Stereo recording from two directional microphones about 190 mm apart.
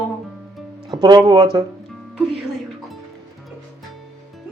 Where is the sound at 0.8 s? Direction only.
20° right (ahead or behind).